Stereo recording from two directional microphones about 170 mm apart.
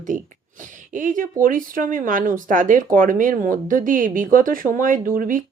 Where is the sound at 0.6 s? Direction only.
50° right (ahead or behind).